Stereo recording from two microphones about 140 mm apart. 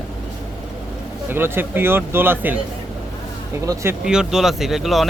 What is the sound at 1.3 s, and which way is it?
Speech, 15° right (ahead or behind).